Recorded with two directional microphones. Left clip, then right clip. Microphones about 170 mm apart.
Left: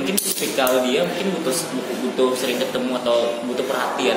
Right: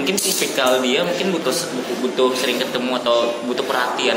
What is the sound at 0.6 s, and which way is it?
Speech, 15° right (ahead or behind).